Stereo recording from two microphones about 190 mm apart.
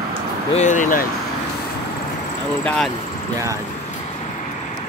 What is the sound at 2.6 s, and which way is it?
Speech, 5° left (ahead or behind).